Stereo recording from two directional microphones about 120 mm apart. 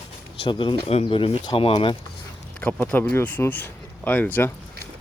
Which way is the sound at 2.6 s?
10° left (ahead or behind).